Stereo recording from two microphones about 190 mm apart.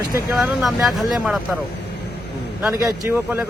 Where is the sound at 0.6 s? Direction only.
Centre (ahead or behind).